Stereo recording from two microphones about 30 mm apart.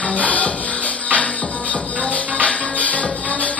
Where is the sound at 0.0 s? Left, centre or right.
Left.